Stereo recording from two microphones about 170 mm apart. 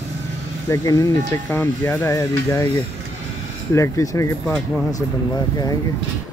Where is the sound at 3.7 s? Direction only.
20° left (ahead or behind).